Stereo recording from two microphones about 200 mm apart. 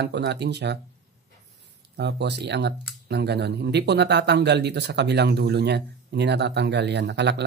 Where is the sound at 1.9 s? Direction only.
55° right (ahead or behind).